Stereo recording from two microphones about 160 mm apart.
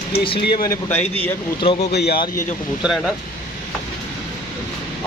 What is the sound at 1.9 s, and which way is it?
Speech, 85° left.